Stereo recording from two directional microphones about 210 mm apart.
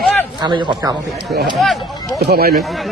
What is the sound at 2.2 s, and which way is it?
Speech, 50° right (ahead or behind).